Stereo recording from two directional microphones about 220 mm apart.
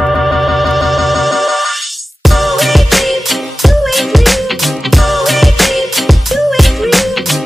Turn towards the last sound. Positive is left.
turn(degrees=0)  # may be behind; listen again after turning